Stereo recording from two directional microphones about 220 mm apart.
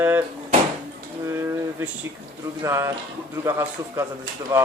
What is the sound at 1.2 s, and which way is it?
Speech, 10° right (ahead or behind).